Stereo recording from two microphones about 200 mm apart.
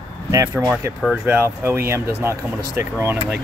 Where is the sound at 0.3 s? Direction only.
15° right (ahead or behind).